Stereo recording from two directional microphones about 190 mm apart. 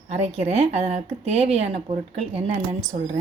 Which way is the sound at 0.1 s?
35° right (ahead or behind).